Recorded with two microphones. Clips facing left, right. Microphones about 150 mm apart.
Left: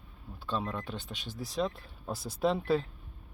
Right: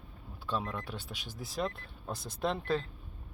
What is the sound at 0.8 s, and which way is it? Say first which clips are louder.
Speech: left 2 dB; 10° right (ahead or behind).